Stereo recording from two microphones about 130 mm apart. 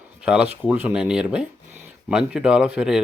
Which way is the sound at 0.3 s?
10° right (ahead or behind).